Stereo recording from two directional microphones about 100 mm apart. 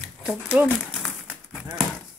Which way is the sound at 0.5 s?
15° right (ahead or behind).